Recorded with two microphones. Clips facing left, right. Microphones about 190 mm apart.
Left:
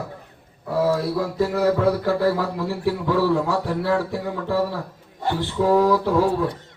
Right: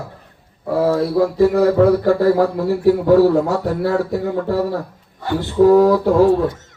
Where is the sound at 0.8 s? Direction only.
55° right (ahead or behind).